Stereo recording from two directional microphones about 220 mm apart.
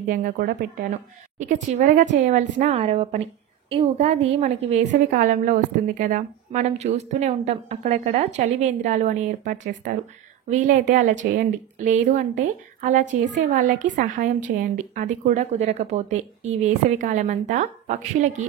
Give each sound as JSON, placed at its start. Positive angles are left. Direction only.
{"t": 0.1, "sound": "a woman's voice", "side_deg": -40}